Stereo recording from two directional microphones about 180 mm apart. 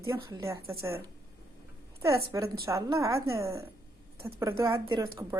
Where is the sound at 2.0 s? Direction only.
15° right (ahead or behind).